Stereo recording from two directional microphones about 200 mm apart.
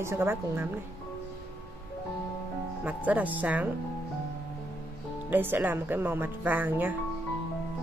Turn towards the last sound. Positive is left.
turn(degrees=-10)  # may be behind; listen again after turning